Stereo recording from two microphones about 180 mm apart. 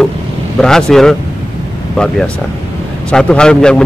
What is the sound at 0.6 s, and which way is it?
Speech, 5° left (ahead or behind).